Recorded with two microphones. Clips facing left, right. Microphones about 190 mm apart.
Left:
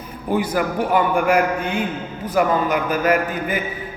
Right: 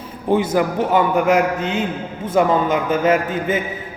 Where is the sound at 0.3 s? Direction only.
25° right (ahead or behind).